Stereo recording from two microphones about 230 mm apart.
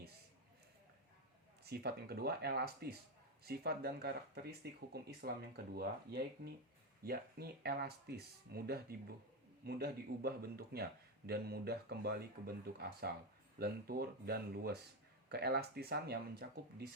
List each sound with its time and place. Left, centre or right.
1.7 s speech: right